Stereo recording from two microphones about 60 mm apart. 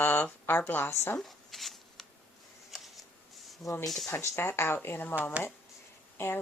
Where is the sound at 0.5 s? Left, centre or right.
Left.